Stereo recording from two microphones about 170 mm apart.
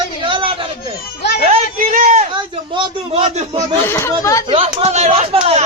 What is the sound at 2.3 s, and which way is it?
Speech, 30° right (ahead or behind).